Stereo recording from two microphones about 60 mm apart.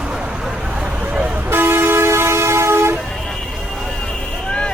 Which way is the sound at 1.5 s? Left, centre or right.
Right.